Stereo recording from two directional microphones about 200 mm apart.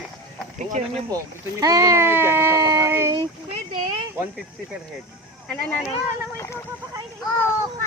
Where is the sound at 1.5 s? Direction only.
20° right (ahead or behind).